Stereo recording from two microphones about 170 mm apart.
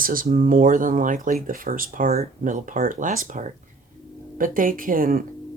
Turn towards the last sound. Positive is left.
turn(degrees=-55)  # may be behind; listen again after turning